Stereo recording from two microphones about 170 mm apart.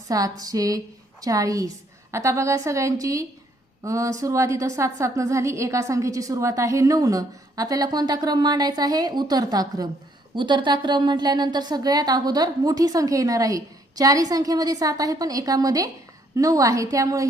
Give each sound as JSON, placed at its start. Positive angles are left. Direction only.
{"t": 0.1, "sound": "a woman's voice", "side_deg": -20}